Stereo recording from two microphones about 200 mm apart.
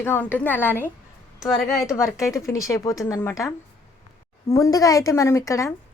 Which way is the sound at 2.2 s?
15° left (ahead or behind).